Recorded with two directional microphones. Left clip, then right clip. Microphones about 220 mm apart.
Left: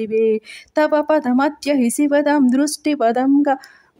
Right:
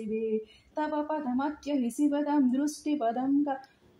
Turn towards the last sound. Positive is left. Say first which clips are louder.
# left 13 dB
turn(degrees=45)  # may be behind; listen again after turning